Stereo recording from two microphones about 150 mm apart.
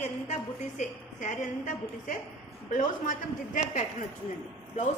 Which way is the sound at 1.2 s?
55° left (ahead or behind).